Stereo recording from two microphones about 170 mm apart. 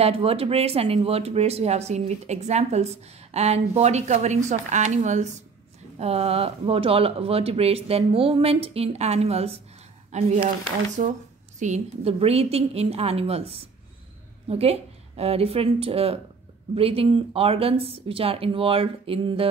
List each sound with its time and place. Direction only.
0.0 s speech: 35° right (ahead or behind)